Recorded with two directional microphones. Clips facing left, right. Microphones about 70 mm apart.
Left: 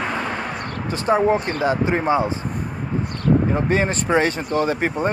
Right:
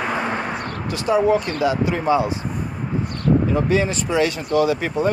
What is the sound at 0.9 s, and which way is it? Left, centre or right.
Speech, left.